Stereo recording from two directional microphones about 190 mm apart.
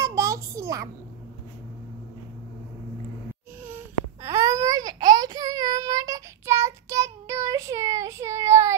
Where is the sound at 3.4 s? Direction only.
10° right (ahead or behind).